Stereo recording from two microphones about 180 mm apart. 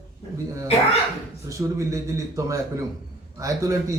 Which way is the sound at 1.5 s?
15° right (ahead or behind).